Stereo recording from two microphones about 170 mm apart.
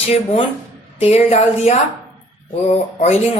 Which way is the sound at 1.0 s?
40° left (ahead or behind).